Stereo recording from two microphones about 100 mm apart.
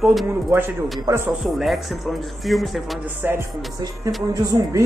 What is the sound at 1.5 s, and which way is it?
Speech, centre (ahead or behind).